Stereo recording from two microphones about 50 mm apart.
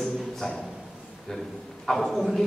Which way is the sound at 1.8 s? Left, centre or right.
Centre.